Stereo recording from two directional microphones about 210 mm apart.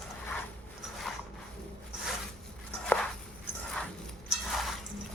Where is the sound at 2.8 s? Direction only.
5° left (ahead or behind).